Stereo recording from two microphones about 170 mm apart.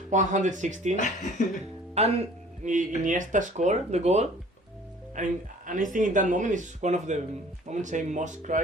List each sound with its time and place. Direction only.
0.1 s speech: 45° right (ahead or behind)
0.9 s speech: 45° left (ahead or behind)
2.0 s speech: 35° right (ahead or behind)
2.6 s speech: 50° right (ahead or behind)